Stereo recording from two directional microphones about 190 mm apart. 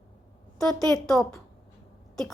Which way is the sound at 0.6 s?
Centre (ahead or behind).